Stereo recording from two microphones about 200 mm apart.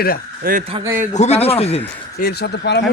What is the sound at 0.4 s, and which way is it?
Speech, 45° right (ahead or behind).